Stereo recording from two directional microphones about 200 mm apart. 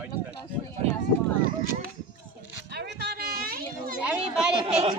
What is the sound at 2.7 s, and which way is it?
Children playing, 55° right (ahead or behind).